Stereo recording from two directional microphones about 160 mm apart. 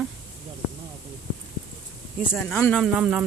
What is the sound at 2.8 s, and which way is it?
Speech, 5° right (ahead or behind).